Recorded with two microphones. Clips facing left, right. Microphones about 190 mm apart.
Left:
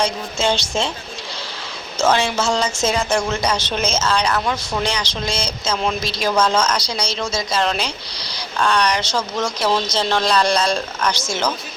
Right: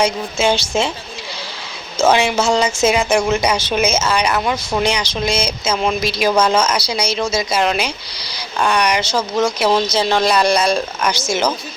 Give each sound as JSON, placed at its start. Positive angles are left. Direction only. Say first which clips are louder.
{"t": 0.0, "sound": "a woman's voice", "louder": "right 4 dB", "side_deg": -5}
{"t": 2.0, "sound": "a woman's voice", "louder": "right 3 dB", "side_deg": -10}